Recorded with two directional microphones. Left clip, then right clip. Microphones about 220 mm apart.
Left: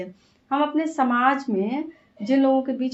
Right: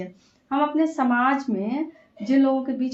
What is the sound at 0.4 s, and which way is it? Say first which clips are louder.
Speech: right 1 dB; 40° left (ahead or behind).